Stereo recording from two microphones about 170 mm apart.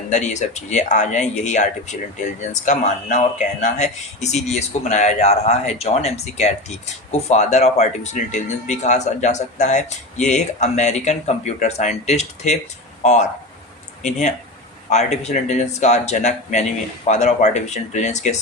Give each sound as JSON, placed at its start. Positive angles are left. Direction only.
{"t": 0.1, "sound": "speech", "side_deg": 45}